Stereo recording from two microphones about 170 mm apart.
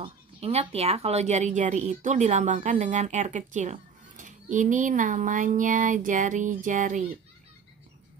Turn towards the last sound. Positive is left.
turn(degrees=-50)  # may be behind; listen again after turning